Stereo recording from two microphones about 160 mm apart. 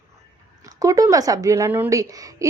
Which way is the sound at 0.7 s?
20° right (ahead or behind).